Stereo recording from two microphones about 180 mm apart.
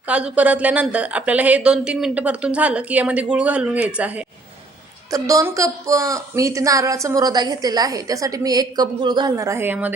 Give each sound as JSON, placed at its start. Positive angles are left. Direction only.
{"t": 0.1, "sound": "speech", "side_deg": -5}
{"t": 5.1, "sound": "a woman's voice", "side_deg": -20}